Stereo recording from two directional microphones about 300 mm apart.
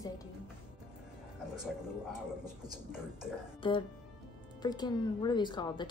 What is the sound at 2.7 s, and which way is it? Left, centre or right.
Speech, centre.